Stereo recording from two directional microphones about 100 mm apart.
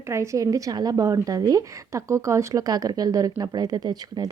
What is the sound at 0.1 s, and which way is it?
A woman's voice, 30° right (ahead or behind).